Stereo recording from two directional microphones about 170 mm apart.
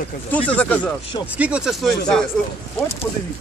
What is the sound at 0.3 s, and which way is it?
Speech, 10° left (ahead or behind).